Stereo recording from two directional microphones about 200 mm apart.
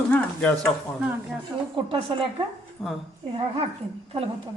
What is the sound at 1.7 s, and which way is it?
Speech, 25° right (ahead or behind).